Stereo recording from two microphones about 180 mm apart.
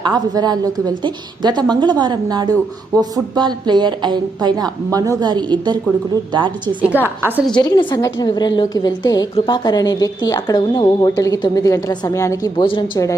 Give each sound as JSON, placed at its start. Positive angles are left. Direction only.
{"t": 0.0, "sound": "a woman's voice", "side_deg": -20}
{"t": 7.2, "sound": "a woman's voice", "side_deg": -10}
{"t": 7.5, "sound": "a woman's voice", "side_deg": 25}